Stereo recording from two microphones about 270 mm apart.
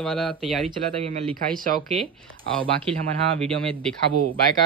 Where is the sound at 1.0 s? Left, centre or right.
Right.